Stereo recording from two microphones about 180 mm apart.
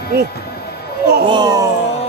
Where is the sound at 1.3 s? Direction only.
25° right (ahead or behind).